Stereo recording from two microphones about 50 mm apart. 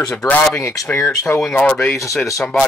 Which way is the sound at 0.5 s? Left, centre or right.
Left.